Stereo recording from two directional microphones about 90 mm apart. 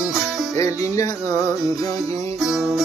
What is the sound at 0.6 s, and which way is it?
Music, 35° left (ahead or behind).